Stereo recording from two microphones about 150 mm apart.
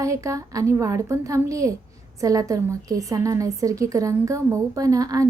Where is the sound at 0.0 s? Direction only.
20° right (ahead or behind).